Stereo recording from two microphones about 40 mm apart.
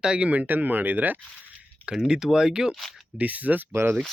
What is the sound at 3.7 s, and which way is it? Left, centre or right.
Speech, right.